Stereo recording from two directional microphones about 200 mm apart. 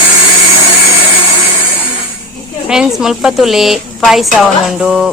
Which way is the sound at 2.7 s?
5° right (ahead or behind).